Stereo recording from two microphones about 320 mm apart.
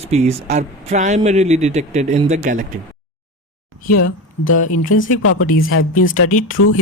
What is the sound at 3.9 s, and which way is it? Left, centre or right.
Speech, left.